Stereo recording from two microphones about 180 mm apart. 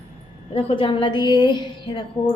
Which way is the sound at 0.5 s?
30° left (ahead or behind).